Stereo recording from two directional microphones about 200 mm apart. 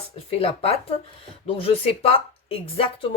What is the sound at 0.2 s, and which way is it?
Speech, 30° left (ahead or behind).